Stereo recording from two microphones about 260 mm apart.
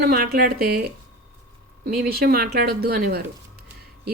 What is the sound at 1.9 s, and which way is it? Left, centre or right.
Speech, right.